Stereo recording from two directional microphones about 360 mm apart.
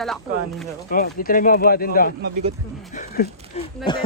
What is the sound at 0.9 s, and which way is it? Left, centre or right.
Speech, left.